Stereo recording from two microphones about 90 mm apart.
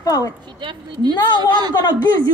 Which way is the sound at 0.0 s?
40° left (ahead or behind).